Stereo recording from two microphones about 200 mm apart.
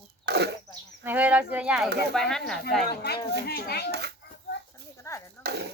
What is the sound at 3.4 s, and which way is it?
Speech, 55° left (ahead or behind).